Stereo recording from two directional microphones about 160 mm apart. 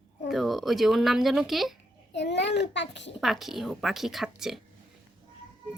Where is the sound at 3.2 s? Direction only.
Centre (ahead or behind).